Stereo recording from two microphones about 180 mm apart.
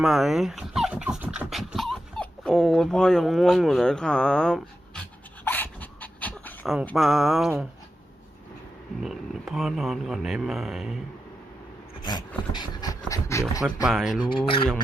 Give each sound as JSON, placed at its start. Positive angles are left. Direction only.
{"t": 0.0, "sound": "speech", "side_deg": 0}
{"t": 5.5, "sound": "dog", "side_deg": 10}
{"t": 6.8, "sound": "speech", "side_deg": 0}
{"t": 9.0, "sound": "speech", "side_deg": 0}
{"t": 12.5, "sound": "pant", "side_deg": 20}
{"t": 13.8, "sound": "speech", "side_deg": 0}
{"t": 14.2, "sound": "speech", "side_deg": 30}